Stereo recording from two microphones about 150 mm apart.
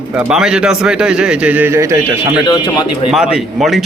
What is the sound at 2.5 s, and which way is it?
Speech, 30° left (ahead or behind).